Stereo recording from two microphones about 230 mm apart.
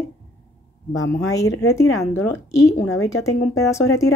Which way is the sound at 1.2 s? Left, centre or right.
Centre.